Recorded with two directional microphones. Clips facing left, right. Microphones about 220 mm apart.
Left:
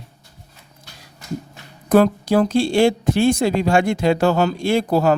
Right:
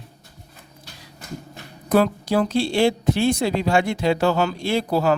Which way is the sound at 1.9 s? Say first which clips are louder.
Left 4 dB; 50° left (ahead or behind).